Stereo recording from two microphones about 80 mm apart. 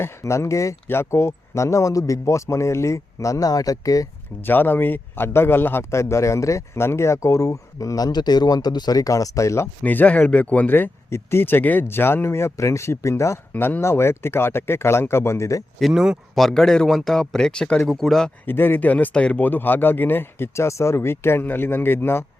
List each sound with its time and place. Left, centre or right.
0.0 s a man's voice: left
4.4 s a man's voice: left
9.8 s speech: left
13.5 s a man's voice: left
15.8 s speech: centre
16.3 s speech: centre
18.4 s speech: left